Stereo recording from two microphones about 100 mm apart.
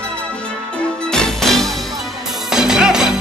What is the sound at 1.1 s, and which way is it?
Music, 5° left (ahead or behind).